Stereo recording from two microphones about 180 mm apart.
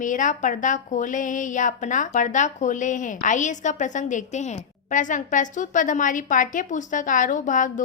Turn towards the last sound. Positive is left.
turn(degrees=45)  # may be behind; listen again after turning